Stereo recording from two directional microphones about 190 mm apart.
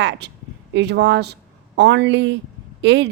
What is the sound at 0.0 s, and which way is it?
A woman's voice, 70° right (ahead or behind).